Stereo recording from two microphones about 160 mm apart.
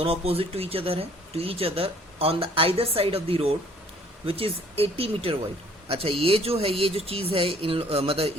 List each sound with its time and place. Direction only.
0.0 s speech: 35° right (ahead or behind)